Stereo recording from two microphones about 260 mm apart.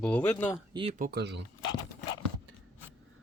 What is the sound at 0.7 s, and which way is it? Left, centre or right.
Speech, right.